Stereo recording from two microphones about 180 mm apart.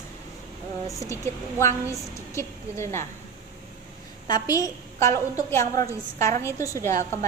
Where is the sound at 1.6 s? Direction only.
15° left (ahead or behind).